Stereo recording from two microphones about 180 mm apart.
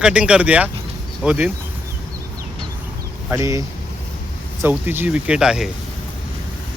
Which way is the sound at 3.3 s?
15° right (ahead or behind).